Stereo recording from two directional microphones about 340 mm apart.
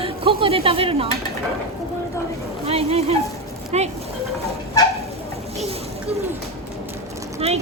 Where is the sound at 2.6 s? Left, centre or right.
Centre.